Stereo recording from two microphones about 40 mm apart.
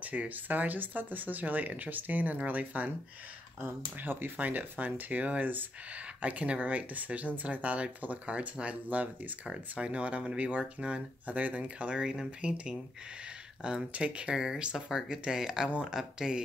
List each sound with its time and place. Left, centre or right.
0.0 s speech: right
3.6 s speech: right
4.4 s speech: right
5.2 s speech: right
8.8 s speech: right
9.5 s speech: right
11.2 s speech: right
12.0 s speech: centre
14.3 s speech: centre